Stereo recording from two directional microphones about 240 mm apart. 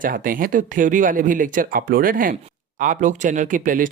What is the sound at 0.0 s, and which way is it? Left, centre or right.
Speech, right.